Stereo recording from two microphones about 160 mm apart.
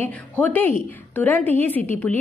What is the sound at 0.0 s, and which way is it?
A woman's voice, 10° left (ahead or behind).